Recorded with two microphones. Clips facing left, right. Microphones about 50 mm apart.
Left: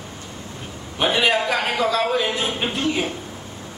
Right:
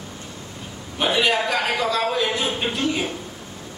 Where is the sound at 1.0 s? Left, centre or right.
Centre.